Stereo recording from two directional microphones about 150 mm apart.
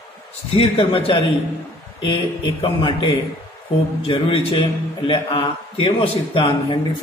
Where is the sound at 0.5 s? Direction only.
40° left (ahead or behind).